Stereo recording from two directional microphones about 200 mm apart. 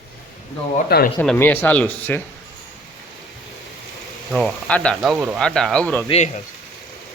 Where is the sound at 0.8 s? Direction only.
50° left (ahead or behind).